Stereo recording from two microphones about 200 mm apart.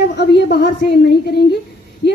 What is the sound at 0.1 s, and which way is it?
Speech, 60° left (ahead or behind).